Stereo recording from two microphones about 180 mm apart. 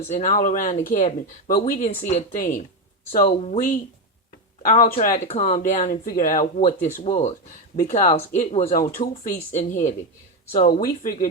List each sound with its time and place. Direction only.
0.1 s speech: 45° left (ahead or behind)
5.5 s speech: 45° left (ahead or behind)
10.8 s speech: 55° left (ahead or behind)